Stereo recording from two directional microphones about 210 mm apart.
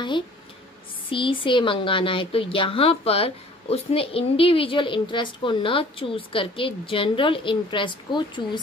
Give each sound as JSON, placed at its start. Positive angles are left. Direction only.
{"t": 1.1, "sound": "speech", "side_deg": 25}